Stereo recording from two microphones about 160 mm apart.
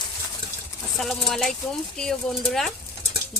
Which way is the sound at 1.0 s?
Centre (ahead or behind).